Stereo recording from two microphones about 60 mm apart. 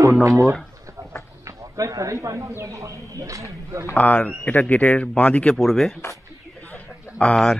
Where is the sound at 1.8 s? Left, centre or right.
Right.